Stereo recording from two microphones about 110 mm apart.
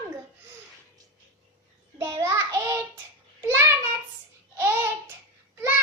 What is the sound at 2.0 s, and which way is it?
Child singing, 25° right (ahead or behind).